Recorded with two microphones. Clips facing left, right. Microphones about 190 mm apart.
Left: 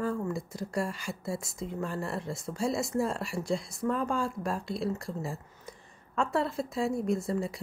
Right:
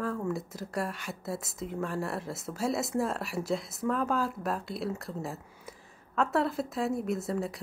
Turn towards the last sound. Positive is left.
turn(degrees=0)  # may be behind; listen again after turning